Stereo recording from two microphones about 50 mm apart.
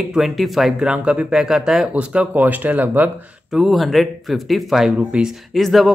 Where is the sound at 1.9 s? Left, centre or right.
Right.